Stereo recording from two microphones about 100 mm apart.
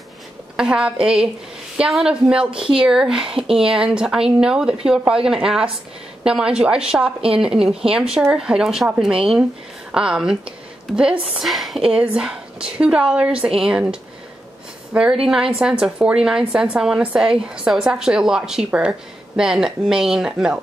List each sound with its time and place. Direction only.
0.6 s a woman's voice: 10° right (ahead or behind)
2.5 s speech: 65° right (ahead or behind)
2.8 s a woman's voice: 5° right (ahead or behind)